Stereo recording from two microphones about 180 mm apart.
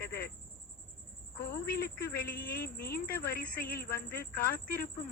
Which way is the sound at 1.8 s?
60° left (ahead or behind).